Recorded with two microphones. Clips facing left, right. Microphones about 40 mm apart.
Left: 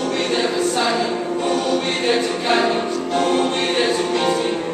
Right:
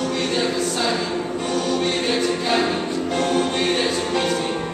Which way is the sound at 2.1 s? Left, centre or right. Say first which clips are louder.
Left 6 dB; centre.